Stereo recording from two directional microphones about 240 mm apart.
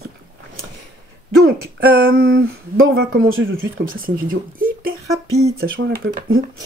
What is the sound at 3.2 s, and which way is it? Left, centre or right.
Speech, right.